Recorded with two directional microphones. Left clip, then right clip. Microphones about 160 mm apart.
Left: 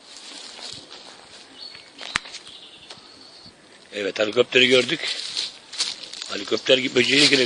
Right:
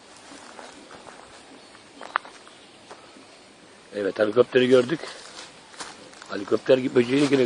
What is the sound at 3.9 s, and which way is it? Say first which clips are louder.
Speech: even; 20° left (ahead or behind).